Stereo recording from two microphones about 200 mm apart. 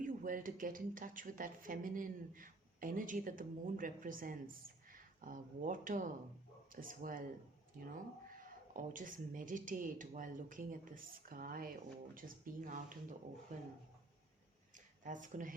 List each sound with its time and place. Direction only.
0.0 s speech: 45° right (ahead or behind)
8.4 s speech: 45° right (ahead or behind)
15.0 s speech: 40° right (ahead or behind)